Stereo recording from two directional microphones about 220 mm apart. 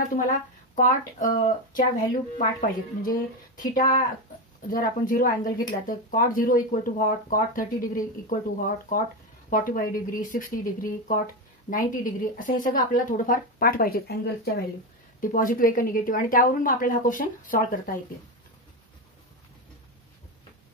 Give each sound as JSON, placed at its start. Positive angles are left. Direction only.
{"t": 0.7, "sound": "speech", "side_deg": 35}